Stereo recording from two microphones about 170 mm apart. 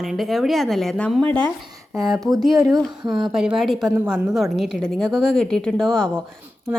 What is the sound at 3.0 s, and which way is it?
Speech, 25° right (ahead or behind).